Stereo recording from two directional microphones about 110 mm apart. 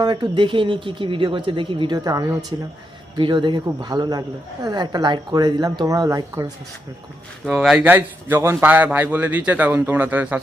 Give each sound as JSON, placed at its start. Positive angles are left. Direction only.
{"t": 0.0, "sound": "speech", "side_deg": -45}
{"t": 2.0, "sound": "speech", "side_deg": -30}
{"t": 3.2, "sound": "speech", "side_deg": -45}
{"t": 7.4, "sound": "speech", "side_deg": 0}
{"t": 7.9, "sound": "a man's voice", "side_deg": -20}